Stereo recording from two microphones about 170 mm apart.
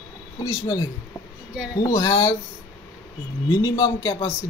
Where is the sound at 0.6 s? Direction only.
20° left (ahead or behind).